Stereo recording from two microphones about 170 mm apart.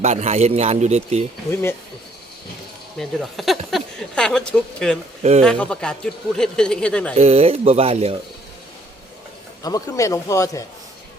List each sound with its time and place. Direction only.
0.0 s a man's voice: 40° right (ahead or behind)
3.0 s a man's voice: centre (ahead or behind)
7.2 s a man's voice: 40° right (ahead or behind)
9.6 s speech: 20° left (ahead or behind)